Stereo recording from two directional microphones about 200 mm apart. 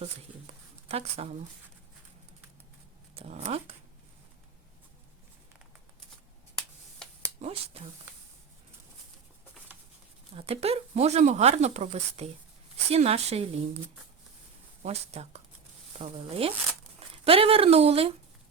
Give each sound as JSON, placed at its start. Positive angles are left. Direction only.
{"t": 0.0, "sound": "speech", "side_deg": -30}
{"t": 3.2, "sound": "speech", "side_deg": -30}
{"t": 7.4, "sound": "speech", "side_deg": -30}
{"t": 10.3, "sound": "speech", "side_deg": -30}
{"t": 14.8, "sound": "speech", "side_deg": -30}